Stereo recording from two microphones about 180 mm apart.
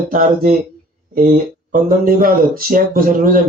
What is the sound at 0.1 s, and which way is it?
Speech, 50° right (ahead or behind).